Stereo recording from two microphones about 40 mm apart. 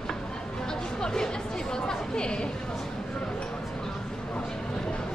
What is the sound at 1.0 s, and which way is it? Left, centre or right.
Chatter, centre.